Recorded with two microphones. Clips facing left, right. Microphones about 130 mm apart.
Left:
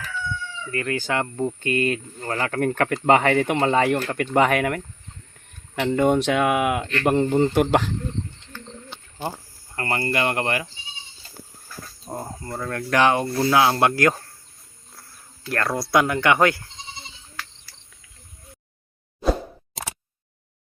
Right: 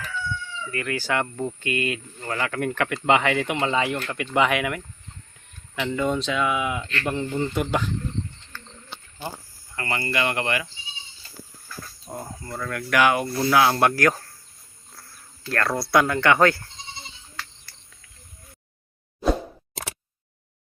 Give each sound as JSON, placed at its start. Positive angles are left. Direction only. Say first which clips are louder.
{"t": 0.7, "sound": "speech", "louder": "left 1 dB", "side_deg": 30}
{"t": 1.6, "sound": "speech", "louder": "left 5 dB", "side_deg": 40}
{"t": 7.5, "sound": "speech", "louder": "left 6 dB", "side_deg": 65}
{"t": 9.7, "sound": "speech", "louder": "left 2 dB", "side_deg": 40}
{"t": 12.0, "sound": "speech", "louder": "left 3 dB", "side_deg": 30}
{"t": 15.4, "sound": "speech", "louder": "even", "side_deg": 15}
{"t": 19.2, "sound": "plop", "louder": "even", "side_deg": 0}